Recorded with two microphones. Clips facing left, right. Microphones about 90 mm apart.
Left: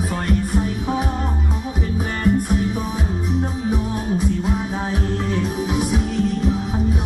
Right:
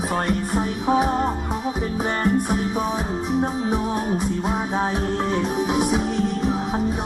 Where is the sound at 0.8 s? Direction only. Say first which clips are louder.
Right 4 dB; 25° right (ahead or behind).